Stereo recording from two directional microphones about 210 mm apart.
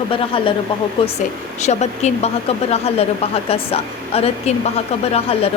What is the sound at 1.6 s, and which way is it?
Speech, 30° left (ahead or behind).